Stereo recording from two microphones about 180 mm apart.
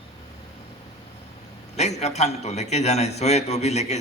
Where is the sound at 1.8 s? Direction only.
40° left (ahead or behind).